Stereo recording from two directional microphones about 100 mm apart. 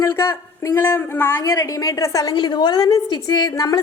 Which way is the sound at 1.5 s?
35° left (ahead or behind).